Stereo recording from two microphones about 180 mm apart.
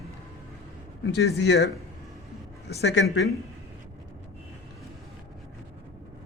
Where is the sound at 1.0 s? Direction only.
70° left (ahead or behind).